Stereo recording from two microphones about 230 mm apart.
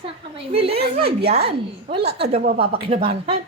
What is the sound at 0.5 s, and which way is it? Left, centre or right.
A child's voice, right.